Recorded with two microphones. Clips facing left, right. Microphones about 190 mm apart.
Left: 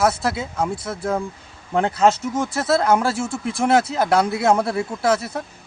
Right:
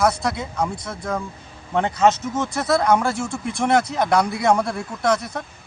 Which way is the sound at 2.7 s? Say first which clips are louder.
Even; 30° left (ahead or behind).